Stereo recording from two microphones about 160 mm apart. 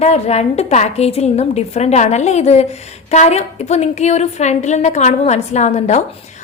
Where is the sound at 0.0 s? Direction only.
40° left (ahead or behind).